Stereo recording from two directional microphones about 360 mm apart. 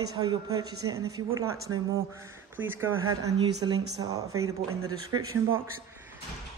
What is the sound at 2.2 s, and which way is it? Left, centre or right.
Speech, centre.